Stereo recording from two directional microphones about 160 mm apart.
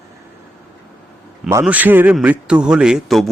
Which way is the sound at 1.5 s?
15° right (ahead or behind).